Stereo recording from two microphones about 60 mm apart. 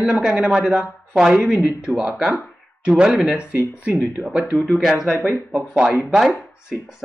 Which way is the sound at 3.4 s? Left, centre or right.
Centre.